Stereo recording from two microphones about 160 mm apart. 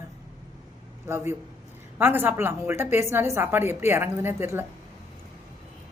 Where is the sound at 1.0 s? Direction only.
15° right (ahead or behind).